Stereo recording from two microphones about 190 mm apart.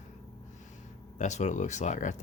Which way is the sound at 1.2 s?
40° left (ahead or behind).